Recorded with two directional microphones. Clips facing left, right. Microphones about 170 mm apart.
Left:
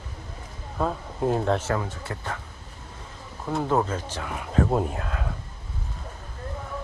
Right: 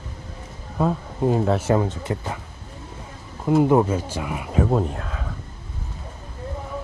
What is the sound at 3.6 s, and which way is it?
Speech, 10° right (ahead or behind).